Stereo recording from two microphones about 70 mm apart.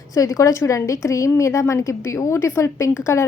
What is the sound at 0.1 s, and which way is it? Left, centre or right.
Speech, left.